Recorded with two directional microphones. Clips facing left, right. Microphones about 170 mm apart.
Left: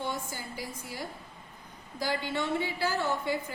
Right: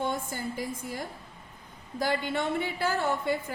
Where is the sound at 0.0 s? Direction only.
50° right (ahead or behind).